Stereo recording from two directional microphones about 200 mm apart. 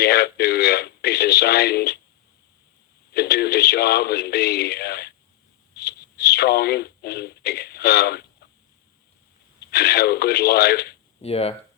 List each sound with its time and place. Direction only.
0.0 s radio: 50° left (ahead or behind)
3.1 s speech: 55° left (ahead or behind)
5.7 s a sound: 55° left (ahead or behind)
9.6 s speech: 55° left (ahead or behind)
11.2 s speech: 30° left (ahead or behind)